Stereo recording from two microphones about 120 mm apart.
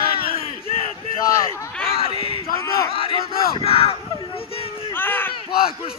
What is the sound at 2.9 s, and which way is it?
Crowd, 50° left (ahead or behind).